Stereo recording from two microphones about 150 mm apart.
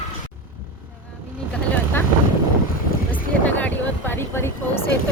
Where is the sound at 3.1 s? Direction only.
10° left (ahead or behind).